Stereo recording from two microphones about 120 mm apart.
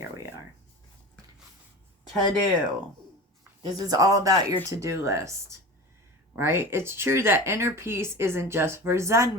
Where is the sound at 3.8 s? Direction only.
30° right (ahead or behind).